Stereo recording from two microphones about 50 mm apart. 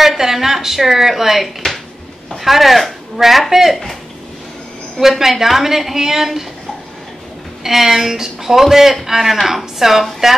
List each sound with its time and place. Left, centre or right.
0.0 s a man's voice: centre
5.0 s a woman's voice: centre
7.6 s a man's voice: centre